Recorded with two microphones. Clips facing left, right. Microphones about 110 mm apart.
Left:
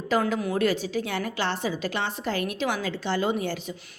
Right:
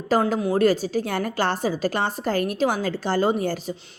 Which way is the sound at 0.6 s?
40° right (ahead or behind).